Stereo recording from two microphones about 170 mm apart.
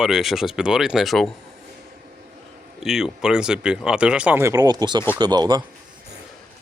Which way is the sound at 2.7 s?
Centre (ahead or behind).